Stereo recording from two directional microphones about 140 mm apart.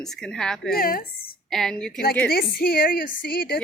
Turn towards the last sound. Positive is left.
turn(degrees=90)